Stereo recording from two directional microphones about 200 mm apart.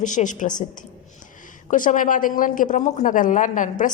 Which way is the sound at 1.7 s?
40° left (ahead or behind).